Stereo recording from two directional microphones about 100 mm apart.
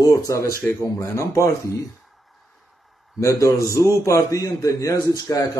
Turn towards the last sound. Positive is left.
turn(degrees=40)  # may be behind; listen again after turning